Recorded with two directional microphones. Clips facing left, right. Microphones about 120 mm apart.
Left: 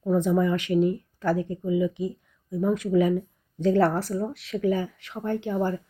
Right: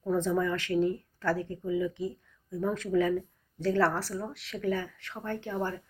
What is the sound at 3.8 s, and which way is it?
Speech, 50° left (ahead or behind).